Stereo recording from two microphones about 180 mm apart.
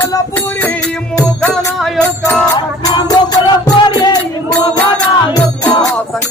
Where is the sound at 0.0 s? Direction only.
10° left (ahead or behind).